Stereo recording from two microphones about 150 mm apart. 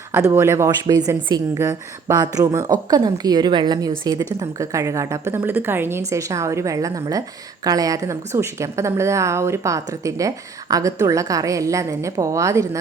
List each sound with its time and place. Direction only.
0.1 s a woman's voice: 15° right (ahead or behind)